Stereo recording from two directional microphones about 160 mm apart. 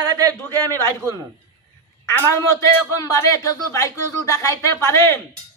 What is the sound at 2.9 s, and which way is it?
A man's voice, 20° left (ahead or behind).